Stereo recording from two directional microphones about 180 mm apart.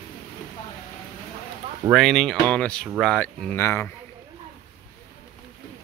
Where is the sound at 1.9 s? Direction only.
5° left (ahead or behind).